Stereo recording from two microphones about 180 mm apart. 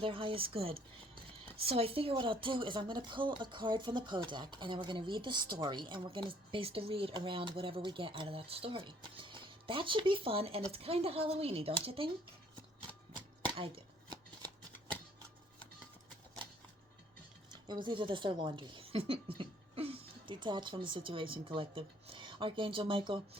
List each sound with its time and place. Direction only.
0.0 s a woman's voice: 30° right (ahead or behind)
13.5 s chopping: 25° right (ahead or behind)
17.8 s speech: 25° right (ahead or behind)